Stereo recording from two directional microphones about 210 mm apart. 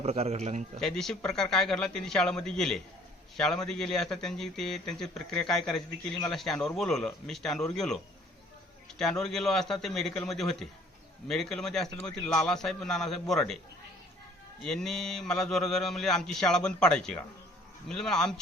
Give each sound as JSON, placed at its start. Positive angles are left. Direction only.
{"t": 0.0, "sound": "a man's voice", "side_deg": -30}
{"t": 0.8, "sound": "speech", "side_deg": 0}
{"t": 14.6, "sound": "speech", "side_deg": 0}